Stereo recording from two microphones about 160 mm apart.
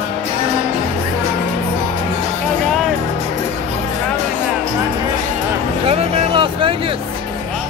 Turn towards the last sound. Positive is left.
turn(degrees=-35)  # may be behind; listen again after turning